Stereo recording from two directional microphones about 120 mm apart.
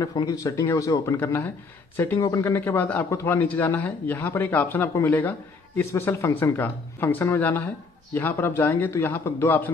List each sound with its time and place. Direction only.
0.0 s a man's voice: 30° left (ahead or behind)
2.2 s a man's voice: 30° left (ahead or behind)
2.5 s speech: 15° left (ahead or behind)